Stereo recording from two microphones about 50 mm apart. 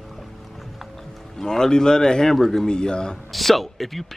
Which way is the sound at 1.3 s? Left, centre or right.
Centre.